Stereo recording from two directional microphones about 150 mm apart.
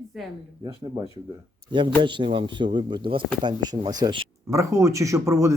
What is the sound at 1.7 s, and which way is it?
Speech, 35° right (ahead or behind).